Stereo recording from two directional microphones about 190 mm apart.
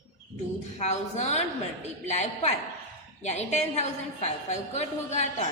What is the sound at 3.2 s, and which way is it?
A woman's voice, 35° left (ahead or behind).